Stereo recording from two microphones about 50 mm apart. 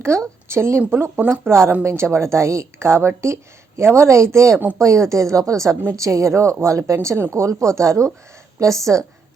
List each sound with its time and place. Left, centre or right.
0.1 s a woman's voice: right
0.4 s speech: right
1.3 s a woman's voice: right
4.8 s speech: right